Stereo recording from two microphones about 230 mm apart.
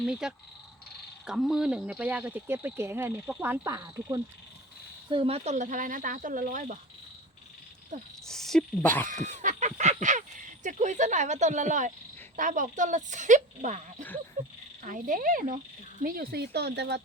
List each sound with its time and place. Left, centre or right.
0.0 s speech: centre; by 6.7 s right
8.3 s speech: centre
9.4 s speech: right